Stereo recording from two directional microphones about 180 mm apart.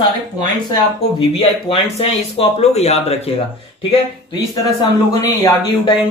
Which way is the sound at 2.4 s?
35° left (ahead or behind).